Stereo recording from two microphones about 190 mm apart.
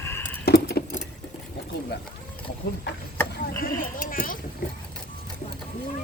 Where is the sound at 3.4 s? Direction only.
50° left (ahead or behind).